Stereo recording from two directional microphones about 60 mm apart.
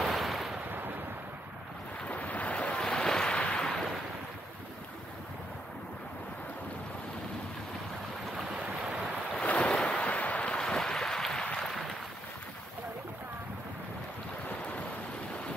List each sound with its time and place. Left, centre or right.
0.0 s ocean: centre
0.7 s a sound: right
2.0 s waves: left
8.4 s boat: centre
9.3 s waves: centre
9.8 s boat: centre
11.4 s a sound: centre
11.7 s boat: centre
14.5 s boat: left